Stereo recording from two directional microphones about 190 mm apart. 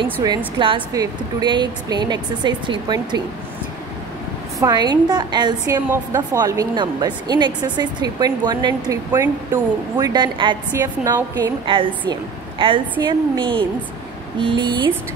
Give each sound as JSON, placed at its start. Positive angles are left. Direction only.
{"t": 0.0, "sound": "a woman's voice", "side_deg": -20}
{"t": 4.6, "sound": "a woman's voice", "side_deg": -20}